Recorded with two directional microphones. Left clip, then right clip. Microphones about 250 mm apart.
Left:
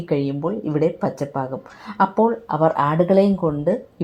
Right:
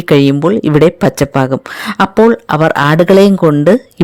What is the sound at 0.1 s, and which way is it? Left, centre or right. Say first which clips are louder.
Speech: right 14 dB; right.